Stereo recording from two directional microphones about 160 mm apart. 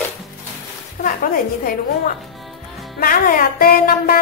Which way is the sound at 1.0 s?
60° left (ahead or behind).